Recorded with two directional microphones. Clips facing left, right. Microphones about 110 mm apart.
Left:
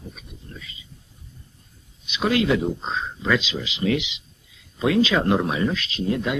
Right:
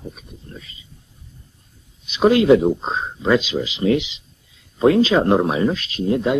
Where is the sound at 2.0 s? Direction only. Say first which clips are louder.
Right 8 dB; 35° right (ahead or behind).